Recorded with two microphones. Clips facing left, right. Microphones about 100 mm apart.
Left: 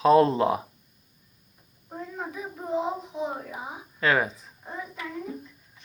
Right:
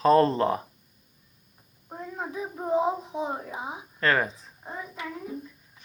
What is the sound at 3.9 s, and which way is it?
Speech, 5° left (ahead or behind).